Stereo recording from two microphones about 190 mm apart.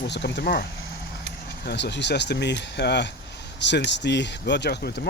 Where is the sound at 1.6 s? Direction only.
65° left (ahead or behind).